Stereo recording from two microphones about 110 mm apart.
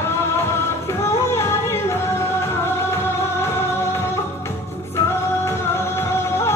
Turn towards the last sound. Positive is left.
turn(degrees=25)  # may be behind; listen again after turning